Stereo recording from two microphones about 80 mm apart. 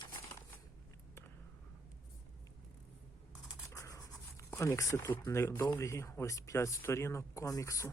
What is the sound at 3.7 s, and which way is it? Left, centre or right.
Rub, left.